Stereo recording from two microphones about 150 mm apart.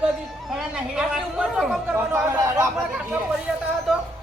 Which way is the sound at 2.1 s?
20° right (ahead or behind).